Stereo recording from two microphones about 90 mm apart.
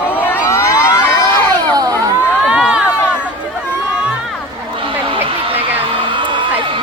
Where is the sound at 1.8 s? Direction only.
45° right (ahead or behind).